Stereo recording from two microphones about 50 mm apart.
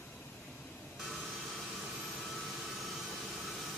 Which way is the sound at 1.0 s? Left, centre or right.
Centre.